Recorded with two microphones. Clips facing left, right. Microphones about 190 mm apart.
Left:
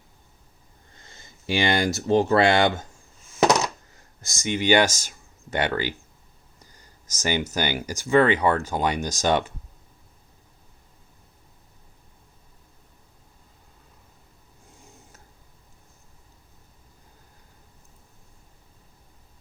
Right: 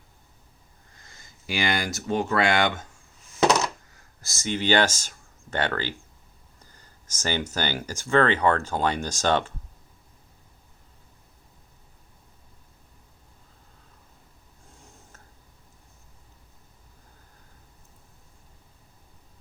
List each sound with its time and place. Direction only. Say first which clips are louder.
0.9 s speech: left 3 dB; 25° left (ahead or behind)
4.2 s speech: left 2 dB; 15° left (ahead or behind)
6.7 s a sound: left 1 dB; 15° left (ahead or behind)
7.5 s speech: left 2 dB; 10° left (ahead or behind)